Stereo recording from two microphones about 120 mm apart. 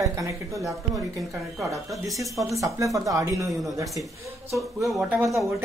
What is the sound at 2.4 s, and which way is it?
Speech, 25° right (ahead or behind).